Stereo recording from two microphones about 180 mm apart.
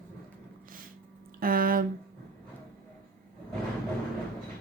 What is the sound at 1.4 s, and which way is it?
Speech, 55° right (ahead or behind).